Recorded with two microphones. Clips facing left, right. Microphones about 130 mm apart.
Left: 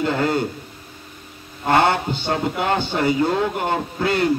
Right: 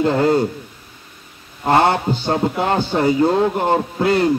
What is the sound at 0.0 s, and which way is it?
Speech, 35° right (ahead or behind).